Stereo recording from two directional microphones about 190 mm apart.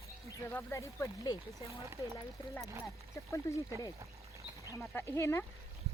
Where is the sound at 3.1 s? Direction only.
15° left (ahead or behind).